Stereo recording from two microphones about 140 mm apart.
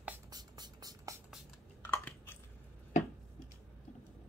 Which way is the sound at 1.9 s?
15° left (ahead or behind).